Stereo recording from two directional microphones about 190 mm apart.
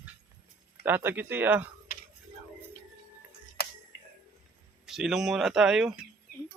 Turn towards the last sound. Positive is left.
turn(degrees=-5)  # may be behind; listen again after turning